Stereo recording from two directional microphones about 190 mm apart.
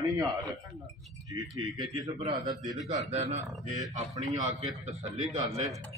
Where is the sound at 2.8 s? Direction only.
35° right (ahead or behind).